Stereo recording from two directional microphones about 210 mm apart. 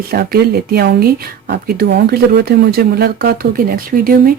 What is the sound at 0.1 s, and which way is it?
Speech, 50° right (ahead or behind).